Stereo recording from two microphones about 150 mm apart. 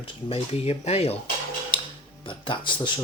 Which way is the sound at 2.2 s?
35° left (ahead or behind).